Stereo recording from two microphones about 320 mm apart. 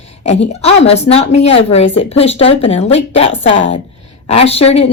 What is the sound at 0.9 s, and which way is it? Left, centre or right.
A woman's voice, centre.